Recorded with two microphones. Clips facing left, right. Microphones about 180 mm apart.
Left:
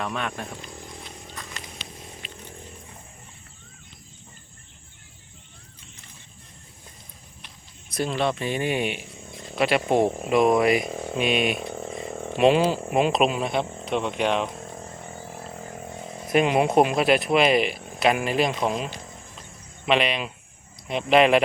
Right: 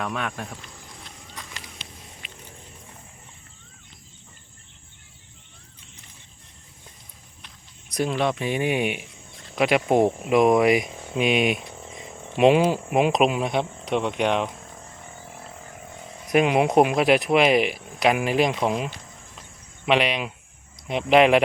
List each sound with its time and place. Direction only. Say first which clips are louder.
0.0 s speech: even; 5° right (ahead or behind)
7.9 s speech: right 1 dB; 10° right (ahead or behind)
11.6 s a sound: left 8 dB; 50° left (ahead or behind)
12.4 s speech: right 2 dB; 15° right (ahead or behind)
16.3 s speech: right 1 dB; 10° right (ahead or behind)